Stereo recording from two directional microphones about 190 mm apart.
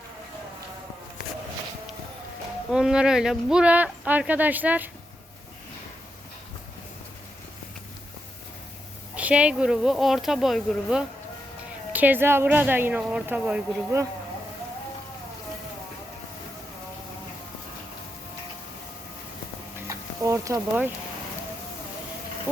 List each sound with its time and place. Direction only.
2.7 s speech: 5° right (ahead or behind)
9.1 s speech: 5° right (ahead or behind)
19.9 s a sound: 15° right (ahead or behind)